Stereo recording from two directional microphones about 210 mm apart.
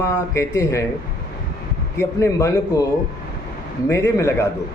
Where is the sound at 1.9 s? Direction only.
15° left (ahead or behind).